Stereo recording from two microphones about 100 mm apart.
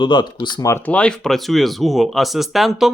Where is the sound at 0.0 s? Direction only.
50° left (ahead or behind).